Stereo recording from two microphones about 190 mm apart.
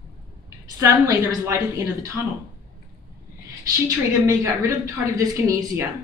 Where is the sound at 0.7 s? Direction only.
15° right (ahead or behind).